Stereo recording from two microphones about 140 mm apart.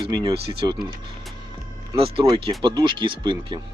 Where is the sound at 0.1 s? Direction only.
30° right (ahead or behind).